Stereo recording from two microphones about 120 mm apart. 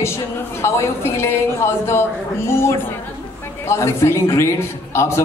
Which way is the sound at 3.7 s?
25° left (ahead or behind).